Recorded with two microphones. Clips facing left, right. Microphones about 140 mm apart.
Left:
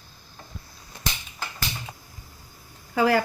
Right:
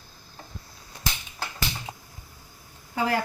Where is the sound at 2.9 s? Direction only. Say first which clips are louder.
Left 5 dB; 90° left.